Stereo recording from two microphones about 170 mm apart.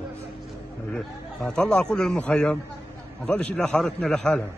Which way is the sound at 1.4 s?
5° left (ahead or behind).